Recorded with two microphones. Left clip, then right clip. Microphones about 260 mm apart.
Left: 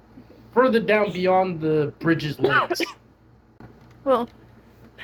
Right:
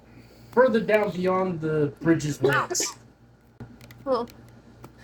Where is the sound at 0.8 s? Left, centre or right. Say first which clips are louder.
Left 3 dB; left.